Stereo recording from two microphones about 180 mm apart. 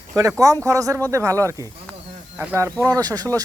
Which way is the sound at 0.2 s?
20° right (ahead or behind).